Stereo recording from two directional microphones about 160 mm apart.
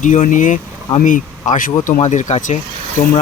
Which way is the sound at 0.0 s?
50° left (ahead or behind).